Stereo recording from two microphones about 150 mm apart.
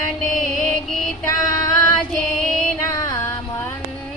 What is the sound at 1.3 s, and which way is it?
Female singing, 20° left (ahead or behind).